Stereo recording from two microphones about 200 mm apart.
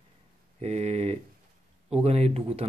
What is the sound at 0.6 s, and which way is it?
Speech, 35° right (ahead or behind).